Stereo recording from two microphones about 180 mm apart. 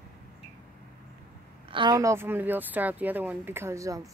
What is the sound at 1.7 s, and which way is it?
Speech, 25° right (ahead or behind).